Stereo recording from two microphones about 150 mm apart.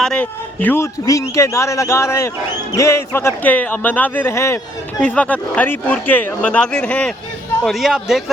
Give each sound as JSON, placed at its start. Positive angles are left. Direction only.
{"t": 0.0, "sound": "speech", "side_deg": 5}
{"t": 4.9, "sound": "a man's voice", "side_deg": 10}